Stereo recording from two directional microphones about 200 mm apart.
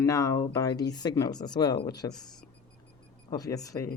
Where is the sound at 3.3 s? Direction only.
20° left (ahead or behind).